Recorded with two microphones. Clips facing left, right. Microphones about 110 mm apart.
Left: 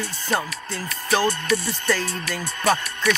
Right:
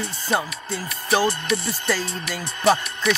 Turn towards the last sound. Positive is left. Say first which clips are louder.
# right 2 dB
turn(degrees=-15)  # may be behind; listen again after turning